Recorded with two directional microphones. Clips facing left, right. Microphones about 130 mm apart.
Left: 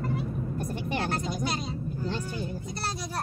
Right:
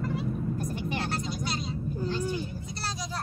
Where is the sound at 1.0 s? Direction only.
50° left (ahead or behind).